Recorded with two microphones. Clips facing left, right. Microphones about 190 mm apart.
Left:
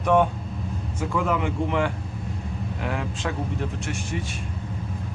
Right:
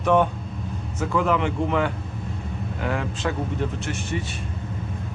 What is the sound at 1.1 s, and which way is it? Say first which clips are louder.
Speech: right 3 dB; centre (ahead or behind).